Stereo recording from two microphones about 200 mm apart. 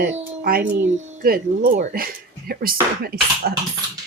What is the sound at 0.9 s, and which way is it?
Speech, 50° right (ahead or behind).